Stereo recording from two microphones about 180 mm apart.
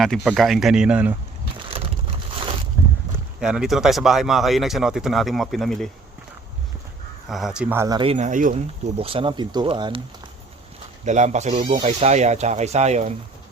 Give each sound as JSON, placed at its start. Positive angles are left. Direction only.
{"t": 0.0, "sound": "speech", "side_deg": 0}
{"t": 3.4, "sound": "speech", "side_deg": -5}
{"t": 7.3, "sound": "speech", "side_deg": 0}
{"t": 7.9, "sound": "speech", "side_deg": -30}
{"t": 9.0, "sound": "speech", "side_deg": -30}
{"t": 11.0, "sound": "speech", "side_deg": -40}
{"t": 11.5, "sound": "speech", "side_deg": -30}